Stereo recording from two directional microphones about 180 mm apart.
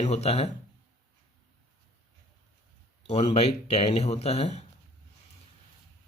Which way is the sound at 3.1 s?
35° left (ahead or behind).